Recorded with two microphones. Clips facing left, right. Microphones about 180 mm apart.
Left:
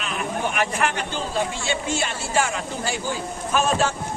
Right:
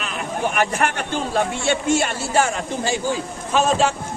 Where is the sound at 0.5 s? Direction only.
45° right (ahead or behind).